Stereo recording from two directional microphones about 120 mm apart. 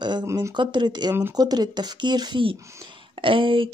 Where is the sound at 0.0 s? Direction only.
40° right (ahead or behind).